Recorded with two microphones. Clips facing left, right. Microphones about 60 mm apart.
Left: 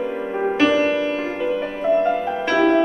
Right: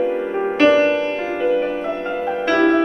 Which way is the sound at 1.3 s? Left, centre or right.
Centre.